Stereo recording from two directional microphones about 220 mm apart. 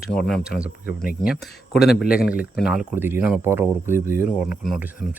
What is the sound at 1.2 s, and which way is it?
Speech, centre (ahead or behind).